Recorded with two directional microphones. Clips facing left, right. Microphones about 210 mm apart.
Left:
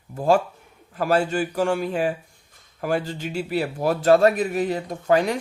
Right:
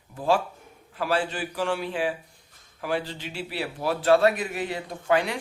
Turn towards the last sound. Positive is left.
turn(degrees=40)  # may be behind; listen again after turning